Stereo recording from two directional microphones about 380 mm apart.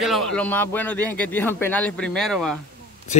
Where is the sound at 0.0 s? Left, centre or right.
Centre.